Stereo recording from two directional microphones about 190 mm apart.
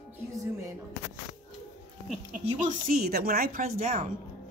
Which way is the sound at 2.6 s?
50° right (ahead or behind).